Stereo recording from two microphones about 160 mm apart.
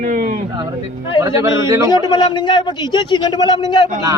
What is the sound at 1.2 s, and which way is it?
Speech, 20° right (ahead or behind).